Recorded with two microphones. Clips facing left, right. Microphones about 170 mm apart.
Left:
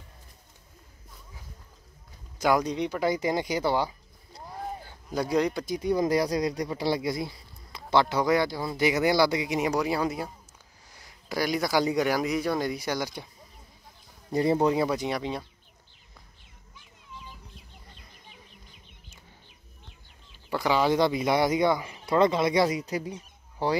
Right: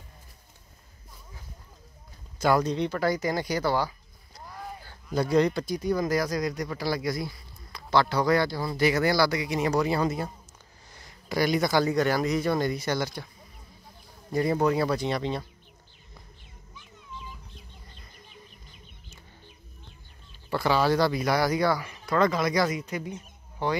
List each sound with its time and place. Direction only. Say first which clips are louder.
2.3 s a sound: right 1 dB; 15° left (ahead or behind)
5.1 s speech: right 3 dB; 10° left (ahead or behind)
5.8 s speech: left 3 dB; 25° left (ahead or behind); by 10.3 s 5° left (ahead or behind)
10.9 s a sound: right 2 dB; 5° left (ahead or behind)
11.8 s speech: right 1 dB; 10° left (ahead or behind)
14.3 s speech: left 1 dB; 25° left (ahead or behind); by 15.4 s 10° left (ahead or behind)
20.4 s speech: even; 15° left (ahead or behind); by 23.8 s 35° left (ahead or behind)